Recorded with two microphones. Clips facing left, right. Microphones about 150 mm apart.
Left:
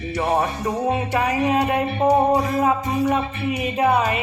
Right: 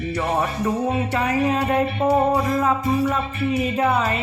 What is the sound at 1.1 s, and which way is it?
Music, 15° left (ahead or behind).